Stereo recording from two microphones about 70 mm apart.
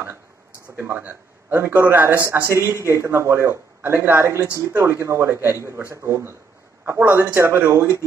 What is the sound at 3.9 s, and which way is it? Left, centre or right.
Speech, right.